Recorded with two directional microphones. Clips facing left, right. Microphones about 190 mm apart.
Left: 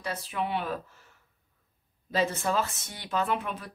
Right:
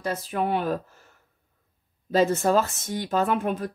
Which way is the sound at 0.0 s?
45° right (ahead or behind).